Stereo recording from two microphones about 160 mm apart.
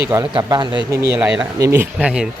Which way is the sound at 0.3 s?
25° right (ahead or behind).